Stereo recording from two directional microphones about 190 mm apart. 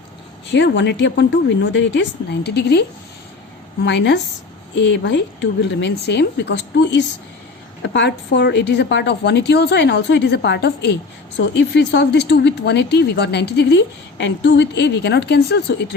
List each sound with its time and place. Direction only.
0.5 s a woman's voice: 70° left (ahead or behind)
3.8 s a woman's voice: 65° left (ahead or behind)